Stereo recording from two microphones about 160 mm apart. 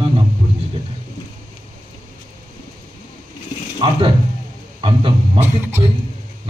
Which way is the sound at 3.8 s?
30° right (ahead or behind).